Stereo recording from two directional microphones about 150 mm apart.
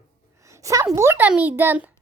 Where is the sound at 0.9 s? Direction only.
15° right (ahead or behind).